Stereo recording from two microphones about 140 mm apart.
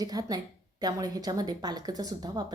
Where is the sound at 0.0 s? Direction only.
25° right (ahead or behind).